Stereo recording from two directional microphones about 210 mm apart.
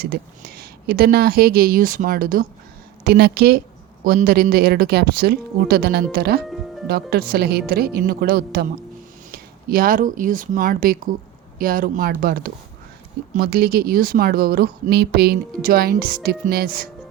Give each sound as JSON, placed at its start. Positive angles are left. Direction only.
{"t": 0.0, "sound": "speech", "side_deg": -50}
{"t": 6.5, "sound": "music", "side_deg": 0}
{"t": 6.8, "sound": "speech", "side_deg": -45}